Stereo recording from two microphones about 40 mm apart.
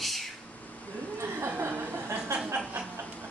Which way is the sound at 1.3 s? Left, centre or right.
Right.